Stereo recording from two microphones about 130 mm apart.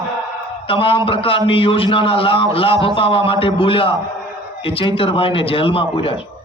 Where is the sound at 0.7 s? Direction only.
40° left (ahead or behind).